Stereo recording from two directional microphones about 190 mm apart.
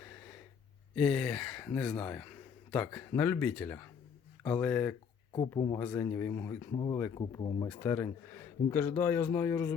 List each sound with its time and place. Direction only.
0.9 s speech: centre (ahead or behind); by 7.7 s 20° left (ahead or behind)
7.7 s speech: 10° left (ahead or behind)